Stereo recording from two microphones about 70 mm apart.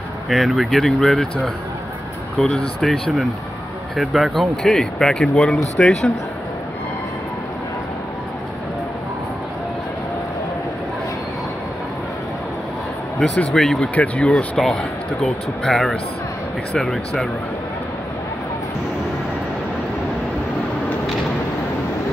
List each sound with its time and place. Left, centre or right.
0.3 s speech: centre
13.5 s speech: centre
13.9 s speech: left
14.6 s speech: centre